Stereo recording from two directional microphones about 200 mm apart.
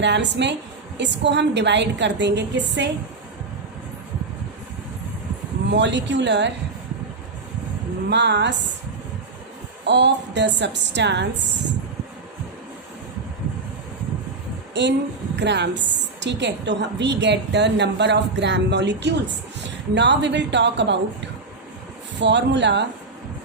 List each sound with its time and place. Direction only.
0.0 s a woman's voice: 60° right (ahead or behind)
5.7 s a woman's voice: 60° right (ahead or behind)
8.1 s a woman's voice: 60° right (ahead or behind)
9.8 s a woman's voice: 60° right (ahead or behind)
14.7 s a sound: 60° right (ahead or behind)
15.4 s a woman's voice: 60° right (ahead or behind)
22.2 s a woman's voice: 60° right (ahead or behind)